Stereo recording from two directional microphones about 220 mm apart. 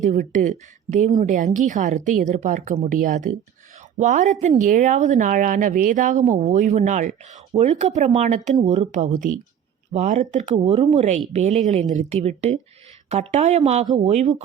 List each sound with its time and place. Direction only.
0.0 s a woman's voice: 35° right (ahead or behind)